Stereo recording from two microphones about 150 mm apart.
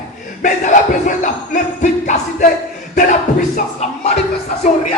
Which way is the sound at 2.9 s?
55° left (ahead or behind).